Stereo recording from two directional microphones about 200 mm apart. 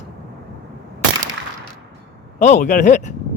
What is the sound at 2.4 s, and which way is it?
Speech, 35° left (ahead or behind).